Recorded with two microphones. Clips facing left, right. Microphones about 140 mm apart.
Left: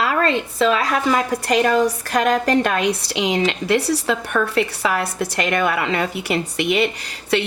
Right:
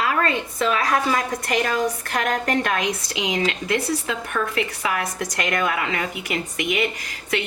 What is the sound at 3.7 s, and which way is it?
Speech, 75° left (ahead or behind).